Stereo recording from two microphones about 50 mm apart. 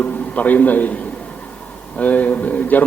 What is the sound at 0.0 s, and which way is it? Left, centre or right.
Speech, left.